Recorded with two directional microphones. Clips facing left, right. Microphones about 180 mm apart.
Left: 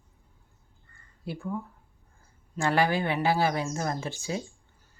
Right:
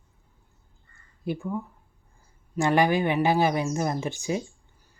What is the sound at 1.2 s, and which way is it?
Speech, 20° right (ahead or behind).